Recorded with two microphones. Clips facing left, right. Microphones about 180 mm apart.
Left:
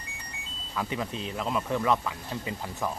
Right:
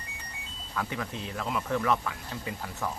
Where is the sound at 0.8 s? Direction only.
20° left (ahead or behind).